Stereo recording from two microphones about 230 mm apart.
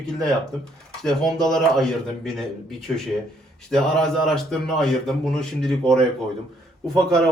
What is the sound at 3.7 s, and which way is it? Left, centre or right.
Speech, centre.